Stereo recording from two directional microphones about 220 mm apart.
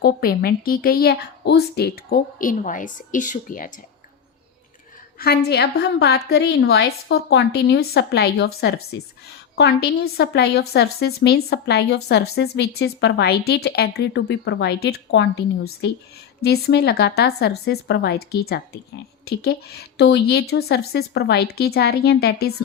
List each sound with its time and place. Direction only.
0.0 s a woman's voice: 45° left (ahead or behind)
5.2 s a woman's voice: 45° left (ahead or behind)
9.6 s a woman's voice: 45° left (ahead or behind)